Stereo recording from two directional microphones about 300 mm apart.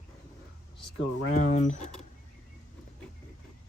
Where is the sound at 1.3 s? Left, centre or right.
Left.